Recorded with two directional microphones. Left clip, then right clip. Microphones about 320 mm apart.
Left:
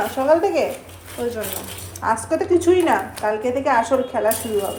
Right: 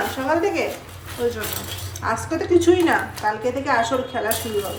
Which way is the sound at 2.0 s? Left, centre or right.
Centre.